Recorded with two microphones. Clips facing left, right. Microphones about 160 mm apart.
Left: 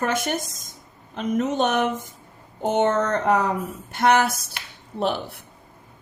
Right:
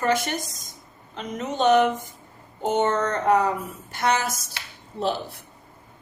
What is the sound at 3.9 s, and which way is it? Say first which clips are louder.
A woman's voice: left 5 dB; 60° left (ahead or behind).